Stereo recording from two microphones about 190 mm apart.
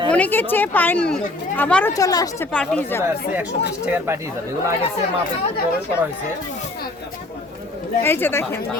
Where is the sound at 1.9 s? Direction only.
20° left (ahead or behind).